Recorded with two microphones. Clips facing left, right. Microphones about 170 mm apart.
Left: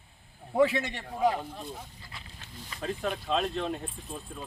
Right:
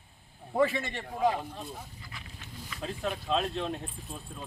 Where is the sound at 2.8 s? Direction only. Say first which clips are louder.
Left 2 dB; centre (ahead or behind).